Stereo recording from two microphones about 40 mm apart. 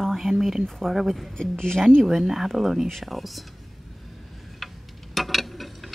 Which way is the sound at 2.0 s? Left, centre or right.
Centre.